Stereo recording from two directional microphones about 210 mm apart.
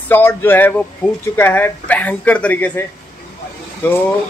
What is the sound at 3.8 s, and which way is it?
Speech, 10° left (ahead or behind).